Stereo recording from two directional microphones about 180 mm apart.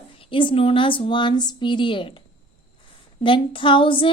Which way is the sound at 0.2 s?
30° left (ahead or behind).